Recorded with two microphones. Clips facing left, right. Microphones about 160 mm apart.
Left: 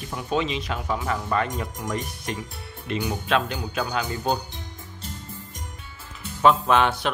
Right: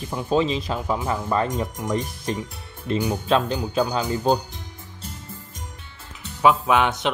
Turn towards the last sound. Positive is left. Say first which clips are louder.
# right 1 dB
turn(degrees=-20)  # may be behind; listen again after turning